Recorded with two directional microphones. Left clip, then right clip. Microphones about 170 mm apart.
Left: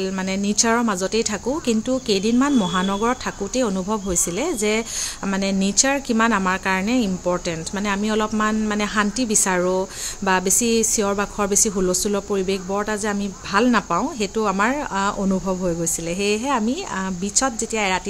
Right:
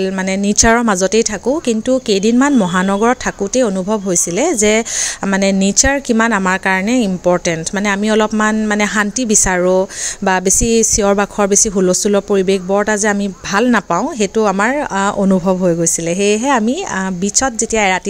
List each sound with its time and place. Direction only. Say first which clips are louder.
0.5 s a woman's voice: right 8 dB; 40° right (ahead or behind)